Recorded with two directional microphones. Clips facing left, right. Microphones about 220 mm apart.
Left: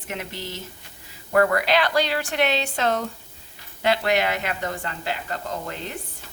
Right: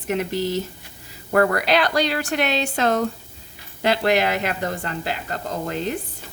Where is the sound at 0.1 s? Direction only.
40° right (ahead or behind).